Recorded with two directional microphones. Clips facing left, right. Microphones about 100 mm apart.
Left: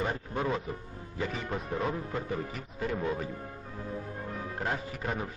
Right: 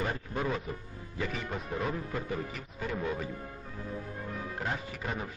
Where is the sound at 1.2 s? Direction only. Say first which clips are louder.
Left 2 dB; 35° left (ahead or behind).